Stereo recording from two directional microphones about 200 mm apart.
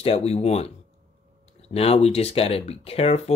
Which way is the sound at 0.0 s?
30° left (ahead or behind).